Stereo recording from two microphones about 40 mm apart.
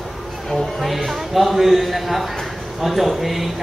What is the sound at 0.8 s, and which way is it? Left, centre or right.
Speech, centre.